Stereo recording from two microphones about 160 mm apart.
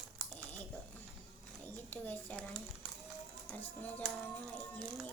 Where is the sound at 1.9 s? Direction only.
10° left (ahead or behind).